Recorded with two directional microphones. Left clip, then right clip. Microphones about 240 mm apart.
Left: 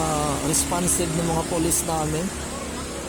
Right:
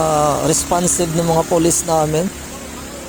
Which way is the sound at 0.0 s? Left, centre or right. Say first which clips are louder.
Right 9 dB; right.